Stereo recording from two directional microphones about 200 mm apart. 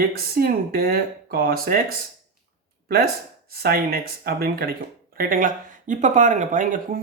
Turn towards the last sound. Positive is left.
turn(degrees=-40)  # may be behind; listen again after turning